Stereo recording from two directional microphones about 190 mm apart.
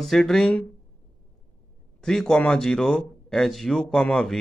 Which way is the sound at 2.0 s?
5° left (ahead or behind).